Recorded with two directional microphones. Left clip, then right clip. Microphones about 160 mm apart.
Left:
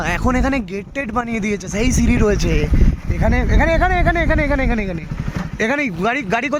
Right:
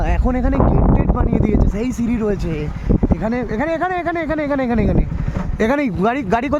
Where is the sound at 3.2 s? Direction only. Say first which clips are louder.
Left 2 dB; 20° right (ahead or behind).